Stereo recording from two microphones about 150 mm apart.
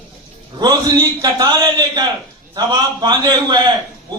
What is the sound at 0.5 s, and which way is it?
A man's voice, 25° right (ahead or behind).